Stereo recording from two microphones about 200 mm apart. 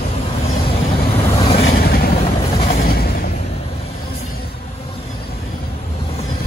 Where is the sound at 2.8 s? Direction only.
50° left (ahead or behind).